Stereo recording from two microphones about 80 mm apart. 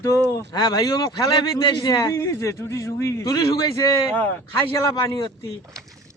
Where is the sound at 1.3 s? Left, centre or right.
Left.